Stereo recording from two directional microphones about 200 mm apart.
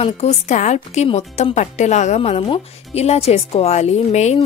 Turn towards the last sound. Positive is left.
turn(degrees=35)  # may be behind; listen again after turning